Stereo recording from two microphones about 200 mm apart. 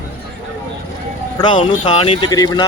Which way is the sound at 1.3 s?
20° left (ahead or behind).